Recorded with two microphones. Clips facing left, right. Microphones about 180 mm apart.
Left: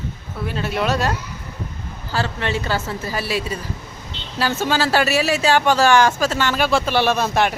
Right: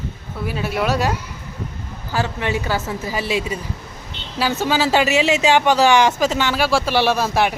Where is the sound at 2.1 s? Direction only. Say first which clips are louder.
Right 1 dB; 15° right (ahead or behind).